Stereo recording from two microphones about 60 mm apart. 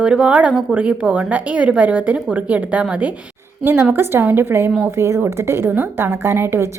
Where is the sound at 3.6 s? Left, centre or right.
Right.